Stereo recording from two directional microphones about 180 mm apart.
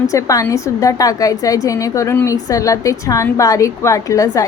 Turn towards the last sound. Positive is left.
turn(degrees=20)  # may be behind; listen again after turning